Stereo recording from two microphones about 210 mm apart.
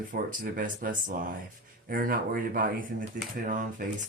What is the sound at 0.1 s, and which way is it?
Speech, 40° right (ahead or behind).